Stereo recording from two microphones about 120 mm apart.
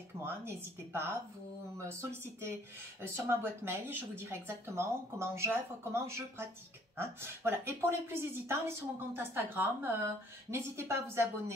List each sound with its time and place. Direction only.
0.2 s speech: 20° right (ahead or behind)